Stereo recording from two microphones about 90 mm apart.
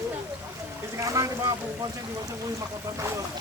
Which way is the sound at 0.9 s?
35° right (ahead or behind).